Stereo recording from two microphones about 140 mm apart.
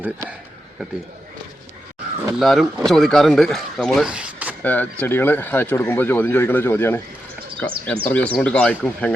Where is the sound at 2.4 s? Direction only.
Centre (ahead or behind).